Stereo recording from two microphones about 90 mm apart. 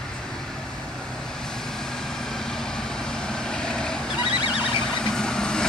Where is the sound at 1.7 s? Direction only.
5° left (ahead or behind).